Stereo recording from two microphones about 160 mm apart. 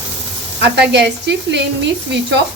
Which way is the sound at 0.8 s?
90° right.